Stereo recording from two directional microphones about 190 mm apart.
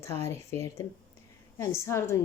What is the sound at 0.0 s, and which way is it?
Speech, 15° left (ahead or behind).